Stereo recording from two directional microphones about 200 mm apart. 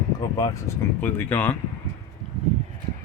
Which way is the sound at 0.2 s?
20° left (ahead or behind).